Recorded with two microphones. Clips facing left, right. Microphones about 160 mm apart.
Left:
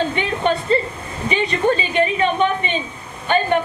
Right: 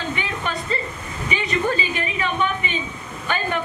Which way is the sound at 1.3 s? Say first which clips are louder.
Left 5 dB; 30° left (ahead or behind).